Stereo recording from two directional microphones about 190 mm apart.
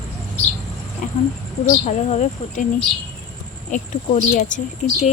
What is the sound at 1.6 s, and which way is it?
Speech, 35° left (ahead or behind).